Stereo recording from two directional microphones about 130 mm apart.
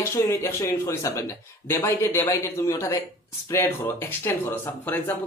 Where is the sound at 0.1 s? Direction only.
20° left (ahead or behind).